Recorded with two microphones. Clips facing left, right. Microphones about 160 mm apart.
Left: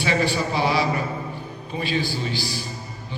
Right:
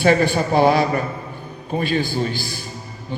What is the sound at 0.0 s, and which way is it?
A man's voice, 50° right (ahead or behind).